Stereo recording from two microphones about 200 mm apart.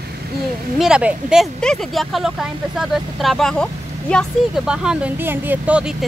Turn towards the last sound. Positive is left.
turn(degrees=-5)  # may be behind; listen again after turning